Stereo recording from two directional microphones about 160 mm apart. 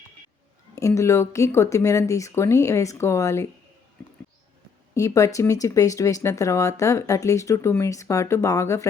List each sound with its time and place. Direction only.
0.8 s speech: 20° left (ahead or behind)
4.9 s speech: 20° left (ahead or behind)